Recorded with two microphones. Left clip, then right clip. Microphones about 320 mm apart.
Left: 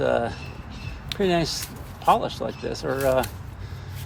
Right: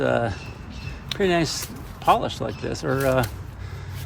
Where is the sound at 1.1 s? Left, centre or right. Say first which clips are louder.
Right 1 dB; centre.